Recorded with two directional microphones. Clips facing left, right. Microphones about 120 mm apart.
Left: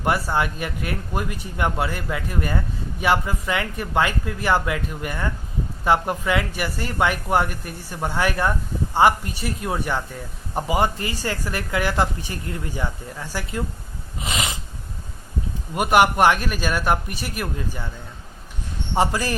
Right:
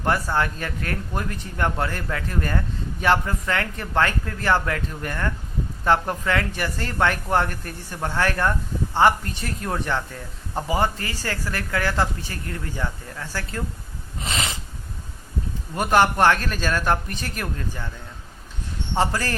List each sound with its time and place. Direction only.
0.0 s speech: 15° left (ahead or behind)
14.2 s snort: 15° left (ahead or behind)
15.7 s speech: 15° left (ahead or behind)
18.9 s speech: 15° left (ahead or behind)